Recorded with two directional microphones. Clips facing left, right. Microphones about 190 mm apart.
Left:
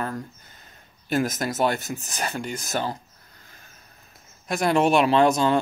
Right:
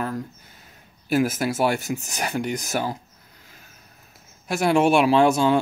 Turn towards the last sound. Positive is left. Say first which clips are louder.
# right 1 dB
turn(degrees=-10)  # may be behind; listen again after turning